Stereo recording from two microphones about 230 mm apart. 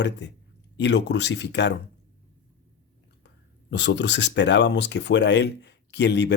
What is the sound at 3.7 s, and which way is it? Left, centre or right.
Speech, left.